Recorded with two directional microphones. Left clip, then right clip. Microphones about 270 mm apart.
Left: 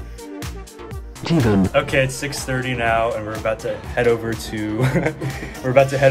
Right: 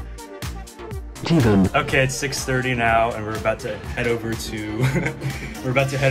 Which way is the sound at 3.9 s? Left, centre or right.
Centre.